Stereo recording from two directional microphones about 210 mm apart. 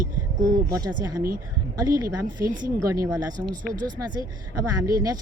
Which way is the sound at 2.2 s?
40° right (ahead or behind).